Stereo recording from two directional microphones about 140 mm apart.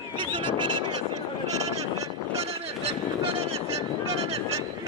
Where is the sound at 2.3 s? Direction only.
45° right (ahead or behind).